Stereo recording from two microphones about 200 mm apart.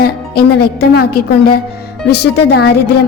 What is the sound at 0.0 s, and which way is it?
A woman's voice, 50° left (ahead or behind).